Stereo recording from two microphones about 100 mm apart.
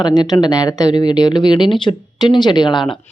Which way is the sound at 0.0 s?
45° left (ahead or behind).